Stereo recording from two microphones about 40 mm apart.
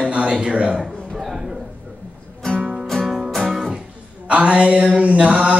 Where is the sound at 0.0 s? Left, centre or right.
Right.